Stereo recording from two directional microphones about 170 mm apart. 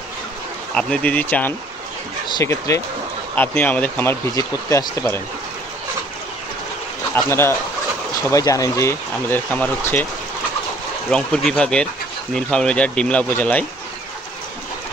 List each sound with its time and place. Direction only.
0.7 s speech: 5° left (ahead or behind)
2.2 s speech: 25° left (ahead or behind)
7.2 s speech: 15° left (ahead or behind)
11.1 s speech: 5° left (ahead or behind)